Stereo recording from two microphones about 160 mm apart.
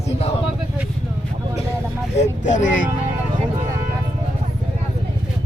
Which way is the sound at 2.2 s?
50° left (ahead or behind).